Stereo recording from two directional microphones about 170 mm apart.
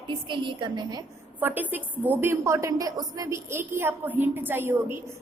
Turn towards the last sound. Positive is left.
turn(degrees=-15)  # may be behind; listen again after turning